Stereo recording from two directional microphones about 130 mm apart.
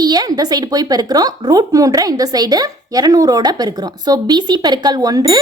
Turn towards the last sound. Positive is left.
turn(degrees=-30)  # may be behind; listen again after turning